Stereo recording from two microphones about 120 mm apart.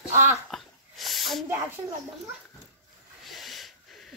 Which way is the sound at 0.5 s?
Centre (ahead or behind).